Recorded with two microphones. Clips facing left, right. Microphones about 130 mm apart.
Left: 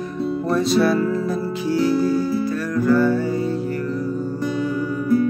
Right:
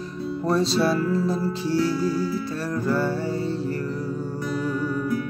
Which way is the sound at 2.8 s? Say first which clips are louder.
Left 8 dB; 30° right (ahead or behind).